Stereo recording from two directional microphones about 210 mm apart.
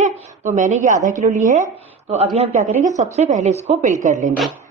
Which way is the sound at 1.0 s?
35° right (ahead or behind).